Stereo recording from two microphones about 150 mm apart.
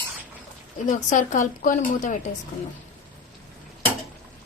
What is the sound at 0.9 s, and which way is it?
A woman's voice, 55° left (ahead or behind).